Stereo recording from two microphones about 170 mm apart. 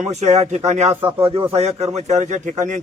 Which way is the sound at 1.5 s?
40° right (ahead or behind).